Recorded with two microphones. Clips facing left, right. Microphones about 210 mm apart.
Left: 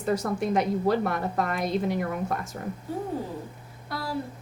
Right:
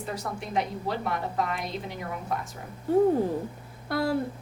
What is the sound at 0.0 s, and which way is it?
A woman's voice, 45° left (ahead or behind).